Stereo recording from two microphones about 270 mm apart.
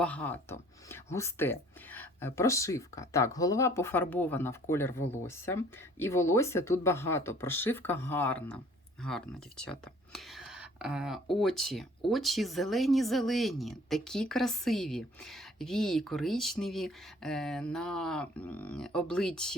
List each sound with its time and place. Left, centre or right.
0.0 s speech: centre